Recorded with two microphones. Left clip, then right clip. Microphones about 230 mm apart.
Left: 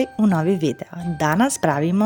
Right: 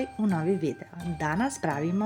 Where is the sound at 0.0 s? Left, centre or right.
Left.